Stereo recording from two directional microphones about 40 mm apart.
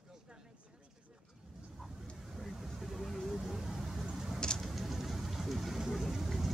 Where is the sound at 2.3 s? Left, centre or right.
Centre.